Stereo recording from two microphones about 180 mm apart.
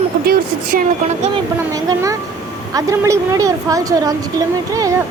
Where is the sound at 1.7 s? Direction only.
20° right (ahead or behind).